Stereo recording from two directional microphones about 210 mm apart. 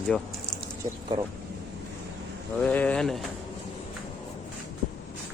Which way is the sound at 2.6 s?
5° left (ahead or behind).